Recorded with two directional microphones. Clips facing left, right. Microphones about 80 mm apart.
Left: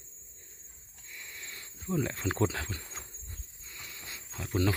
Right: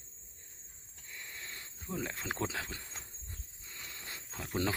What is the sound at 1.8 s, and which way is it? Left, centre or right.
Speech, centre.